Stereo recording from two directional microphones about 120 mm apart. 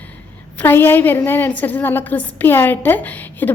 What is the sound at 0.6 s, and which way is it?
A woman's voice, 20° left (ahead or behind).